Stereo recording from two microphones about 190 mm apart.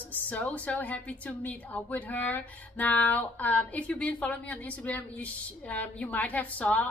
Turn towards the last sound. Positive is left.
turn(degrees=10)  # may be behind; listen again after turning